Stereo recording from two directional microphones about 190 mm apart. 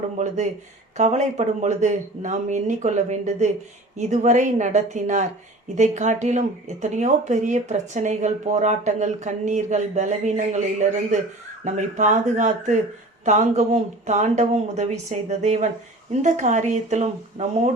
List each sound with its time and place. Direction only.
0.9 s speech: 40° right (ahead or behind)